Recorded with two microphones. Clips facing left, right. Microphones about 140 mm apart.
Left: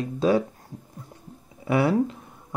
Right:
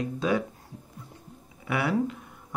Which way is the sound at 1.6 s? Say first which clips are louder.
Left 5 dB; 35° left (ahead or behind).